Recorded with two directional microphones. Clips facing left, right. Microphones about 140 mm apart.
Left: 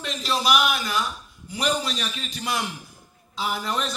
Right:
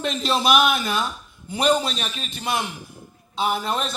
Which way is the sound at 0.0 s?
25° right (ahead or behind).